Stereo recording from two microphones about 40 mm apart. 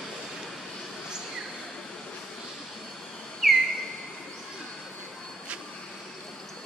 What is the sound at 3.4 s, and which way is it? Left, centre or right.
Whistle, centre.